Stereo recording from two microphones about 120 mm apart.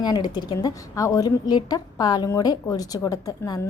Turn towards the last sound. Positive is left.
turn(degrees=30)  # may be behind; listen again after turning